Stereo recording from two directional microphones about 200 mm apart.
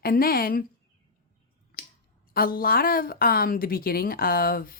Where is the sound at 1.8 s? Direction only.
45° left (ahead or behind).